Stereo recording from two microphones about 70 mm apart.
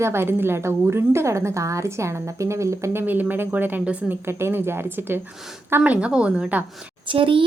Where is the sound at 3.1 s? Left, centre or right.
Right.